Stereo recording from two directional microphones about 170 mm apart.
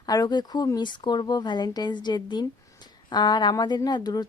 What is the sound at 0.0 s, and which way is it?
Speech, 25° left (ahead or behind).